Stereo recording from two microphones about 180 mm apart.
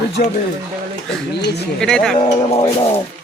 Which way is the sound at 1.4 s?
65° left (ahead or behind).